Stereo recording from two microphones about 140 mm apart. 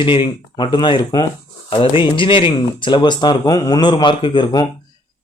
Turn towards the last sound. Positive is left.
turn(degrees=30)  # may be behind; listen again after turning